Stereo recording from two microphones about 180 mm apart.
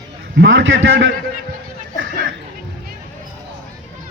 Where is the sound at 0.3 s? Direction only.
90° right.